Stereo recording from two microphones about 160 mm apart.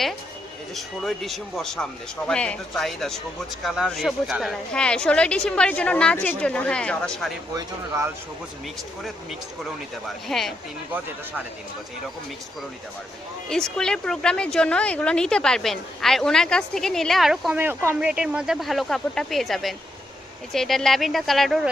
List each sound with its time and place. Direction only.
0.8 s a woman's voice: centre (ahead or behind)
7.5 s speech: 15° right (ahead or behind)
10.2 s a woman's voice: centre (ahead or behind)
13.5 s a woman's voice: 5° left (ahead or behind)
17.6 s a woman's voice: 15° right (ahead or behind)